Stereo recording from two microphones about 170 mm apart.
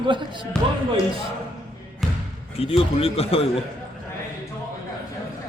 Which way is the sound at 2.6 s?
35° left (ahead or behind).